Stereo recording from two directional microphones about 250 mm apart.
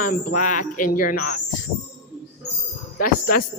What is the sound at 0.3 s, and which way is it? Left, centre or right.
Speech, left.